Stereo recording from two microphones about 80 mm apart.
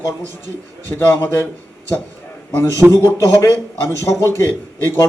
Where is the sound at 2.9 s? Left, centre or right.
Left.